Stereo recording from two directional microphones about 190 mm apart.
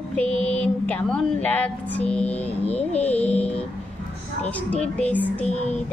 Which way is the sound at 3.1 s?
10° left (ahead or behind).